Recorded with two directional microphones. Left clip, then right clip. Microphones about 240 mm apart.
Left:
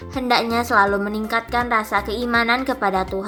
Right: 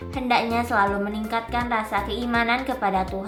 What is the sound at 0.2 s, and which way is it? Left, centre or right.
A woman's voice, left.